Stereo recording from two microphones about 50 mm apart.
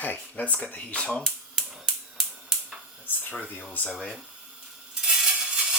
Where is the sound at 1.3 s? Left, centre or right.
Centre.